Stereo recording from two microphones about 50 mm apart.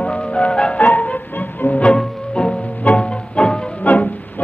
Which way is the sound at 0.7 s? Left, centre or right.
Left.